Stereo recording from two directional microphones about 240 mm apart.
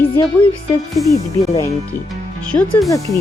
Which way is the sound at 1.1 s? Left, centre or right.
Centre.